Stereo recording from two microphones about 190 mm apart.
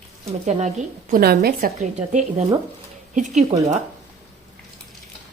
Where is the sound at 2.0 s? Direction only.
35° right (ahead or behind).